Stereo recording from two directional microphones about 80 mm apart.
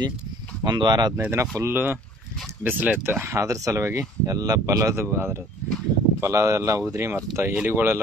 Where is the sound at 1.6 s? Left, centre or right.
Right.